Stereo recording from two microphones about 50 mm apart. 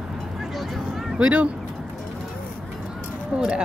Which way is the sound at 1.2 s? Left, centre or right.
Right.